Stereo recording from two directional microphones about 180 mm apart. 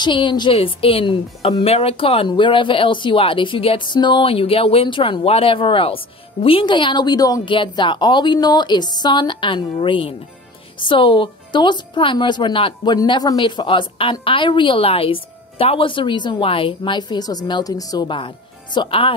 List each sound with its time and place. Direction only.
0.0 s a woman's voice: 25° left (ahead or behind)